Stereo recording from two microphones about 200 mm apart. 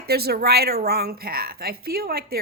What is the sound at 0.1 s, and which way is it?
A woman's voice, 50° right (ahead or behind).